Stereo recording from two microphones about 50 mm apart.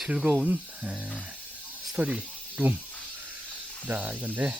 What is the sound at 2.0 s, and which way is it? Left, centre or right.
Speech, right.